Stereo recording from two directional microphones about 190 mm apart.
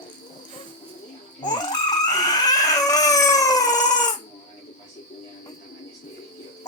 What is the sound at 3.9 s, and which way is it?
Crying, 20° left (ahead or behind).